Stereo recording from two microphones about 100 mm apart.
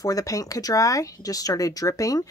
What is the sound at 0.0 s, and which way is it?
Speech, 35° left (ahead or behind).